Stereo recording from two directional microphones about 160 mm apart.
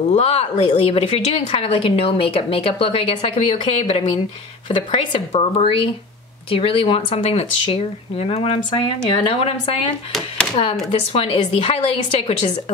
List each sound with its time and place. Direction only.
0.1 s a woman's voice: 40° left (ahead or behind)
10.1 s speech: 5° left (ahead or behind)
10.9 s a woman's voice: 35° left (ahead or behind)